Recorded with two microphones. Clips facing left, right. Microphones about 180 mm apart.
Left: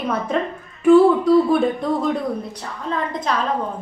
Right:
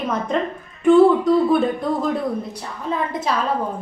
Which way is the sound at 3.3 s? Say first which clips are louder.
Even; 5° right (ahead or behind).